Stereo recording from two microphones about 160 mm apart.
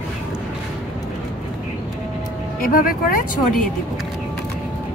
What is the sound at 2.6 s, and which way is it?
Speech, 60° left (ahead or behind).